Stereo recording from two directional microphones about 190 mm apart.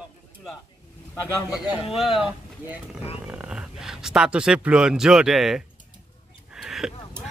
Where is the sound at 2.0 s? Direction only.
Centre (ahead or behind).